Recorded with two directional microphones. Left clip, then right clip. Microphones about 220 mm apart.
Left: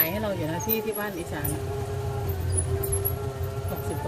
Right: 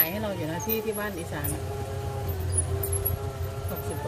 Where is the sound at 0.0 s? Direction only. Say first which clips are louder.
Left 2 dB; 10° left (ahead or behind).